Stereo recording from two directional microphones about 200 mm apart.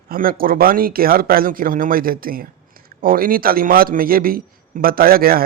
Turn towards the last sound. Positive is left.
turn(degrees=-50)  # may be behind; listen again after turning